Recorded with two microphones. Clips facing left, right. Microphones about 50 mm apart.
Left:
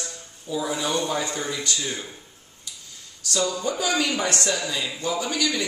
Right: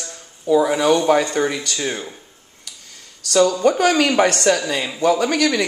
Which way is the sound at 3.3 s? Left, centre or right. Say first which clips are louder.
Right 10 dB; right.